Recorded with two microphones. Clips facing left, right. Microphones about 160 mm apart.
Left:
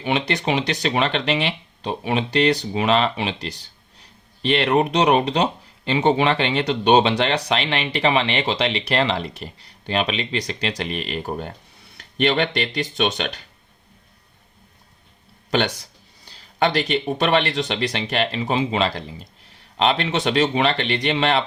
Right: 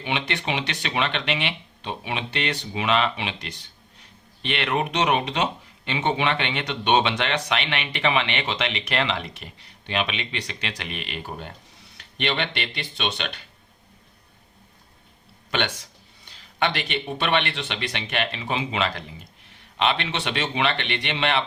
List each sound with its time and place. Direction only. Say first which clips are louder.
0.0 s speech: left 6 dB; 40° left (ahead or behind)
15.4 s speech: left 5 dB; 35° left (ahead or behind)